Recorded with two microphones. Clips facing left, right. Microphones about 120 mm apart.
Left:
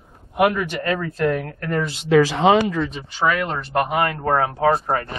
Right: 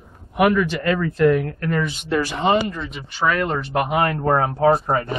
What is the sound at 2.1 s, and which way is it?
Speech, 90° left.